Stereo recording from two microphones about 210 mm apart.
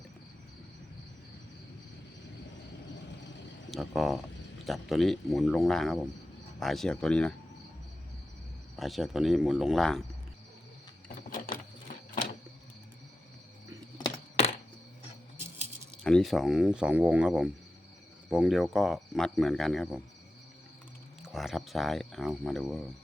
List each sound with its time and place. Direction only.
3.7 s speech: centre (ahead or behind)
8.7 s speech: centre (ahead or behind)
11.5 s a sound: 45° left (ahead or behind)
12.1 s printer: 40° left (ahead or behind)
16.0 s speech: centre (ahead or behind)
21.2 s speech: centre (ahead or behind)